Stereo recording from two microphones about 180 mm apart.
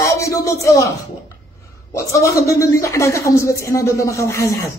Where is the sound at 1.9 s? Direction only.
15° left (ahead or behind).